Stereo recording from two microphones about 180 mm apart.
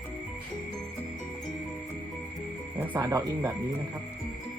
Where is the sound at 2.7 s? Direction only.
15° right (ahead or behind).